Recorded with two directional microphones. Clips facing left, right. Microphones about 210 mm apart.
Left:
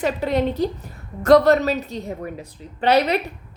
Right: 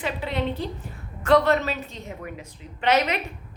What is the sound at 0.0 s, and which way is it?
A woman's voice, 40° left (ahead or behind).